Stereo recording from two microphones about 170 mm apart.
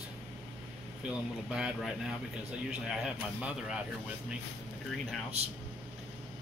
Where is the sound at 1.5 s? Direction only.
5° right (ahead or behind).